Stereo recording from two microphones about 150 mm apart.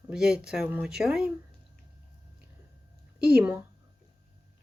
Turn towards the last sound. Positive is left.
turn(degrees=-10)  # may be behind; listen again after turning